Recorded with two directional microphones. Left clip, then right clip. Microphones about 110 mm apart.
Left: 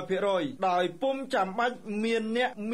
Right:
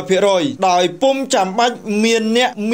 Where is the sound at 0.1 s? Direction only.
30° right (ahead or behind).